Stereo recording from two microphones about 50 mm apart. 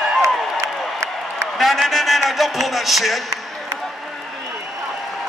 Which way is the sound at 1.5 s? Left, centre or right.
Centre.